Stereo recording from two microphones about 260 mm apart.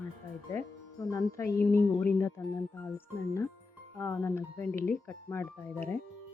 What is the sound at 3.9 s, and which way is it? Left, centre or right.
Speech, centre.